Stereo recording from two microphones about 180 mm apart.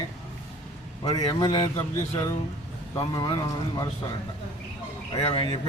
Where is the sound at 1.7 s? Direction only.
15° left (ahead or behind).